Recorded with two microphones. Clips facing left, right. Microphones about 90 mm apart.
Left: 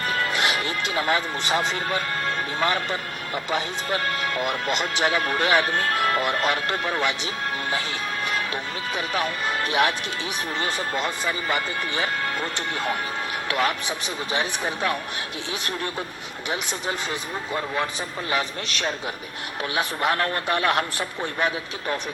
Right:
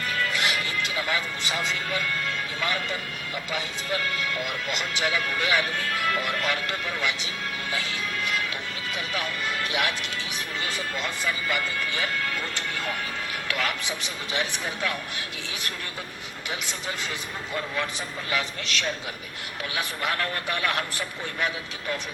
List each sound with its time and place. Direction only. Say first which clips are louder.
0.0 s speech: left 3 dB; 40° left (ahead or behind)
7.7 s music: left 3 dB; 35° left (ahead or behind)
9.0 s speech: left 5 dB; 40° left (ahead or behind)
11.0 s speech: left 3 dB; 30° left (ahead or behind)
13.5 s speech: left 5 dB; 30° left (ahead or behind)
19.7 s speech: left 5 dB; 35° left (ahead or behind)